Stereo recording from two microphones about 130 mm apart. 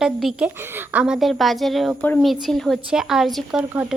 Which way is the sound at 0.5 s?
15° right (ahead or behind).